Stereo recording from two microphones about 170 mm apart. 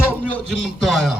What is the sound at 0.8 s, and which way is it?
Speech, centre (ahead or behind).